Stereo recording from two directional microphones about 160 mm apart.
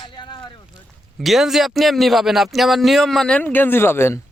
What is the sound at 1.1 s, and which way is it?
A man's voice, centre (ahead or behind).